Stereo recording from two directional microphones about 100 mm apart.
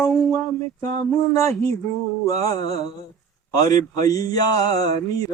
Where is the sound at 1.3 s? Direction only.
30° left (ahead or behind).